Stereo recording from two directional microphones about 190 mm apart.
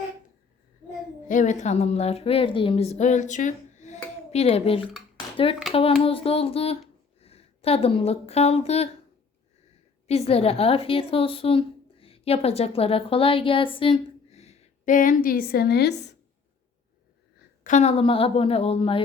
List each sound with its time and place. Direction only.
1.3 s a woman's voice: 40° left (ahead or behind)
10.1 s a woman's voice: 30° left (ahead or behind); by 16.1 s 60° left (ahead or behind)
17.6 s a woman's voice: 40° left (ahead or behind)